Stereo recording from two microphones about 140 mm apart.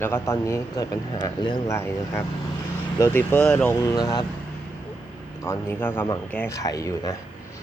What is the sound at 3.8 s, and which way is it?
Speech, 30° left (ahead or behind).